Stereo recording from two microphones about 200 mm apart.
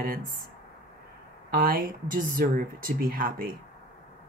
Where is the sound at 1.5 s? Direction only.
45° right (ahead or behind).